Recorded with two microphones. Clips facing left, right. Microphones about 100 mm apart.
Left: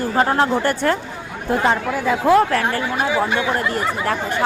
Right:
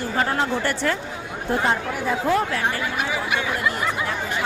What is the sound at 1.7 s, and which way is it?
Speech, 80° left.